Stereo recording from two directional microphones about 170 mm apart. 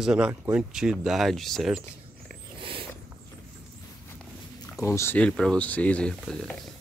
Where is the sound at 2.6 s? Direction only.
30° right (ahead or behind).